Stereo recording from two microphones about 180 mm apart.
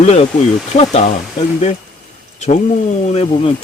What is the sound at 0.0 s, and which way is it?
Speech, 40° left (ahead or behind).